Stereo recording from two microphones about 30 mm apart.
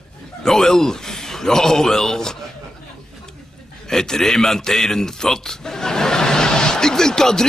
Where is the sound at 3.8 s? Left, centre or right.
Centre.